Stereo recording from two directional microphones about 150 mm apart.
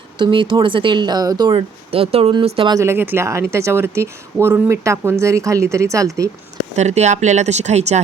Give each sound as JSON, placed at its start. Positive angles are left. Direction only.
{"t": 0.2, "sound": "speech", "side_deg": -35}
{"t": 2.7, "sound": "speech", "side_deg": -15}
{"t": 6.7, "sound": "speech", "side_deg": -50}